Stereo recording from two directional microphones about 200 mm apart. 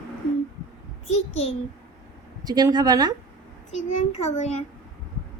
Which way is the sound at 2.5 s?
20° right (ahead or behind).